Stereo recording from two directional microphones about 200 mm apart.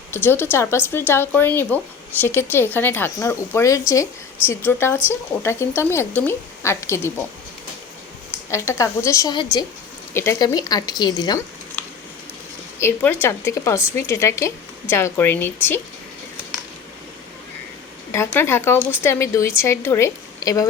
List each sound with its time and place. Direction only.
0.1 s speech: 10° left (ahead or behind)
8.4 s speech: 15° left (ahead or behind)
12.8 s speech: 10° left (ahead or behind)
18.1 s speech: 15° left (ahead or behind)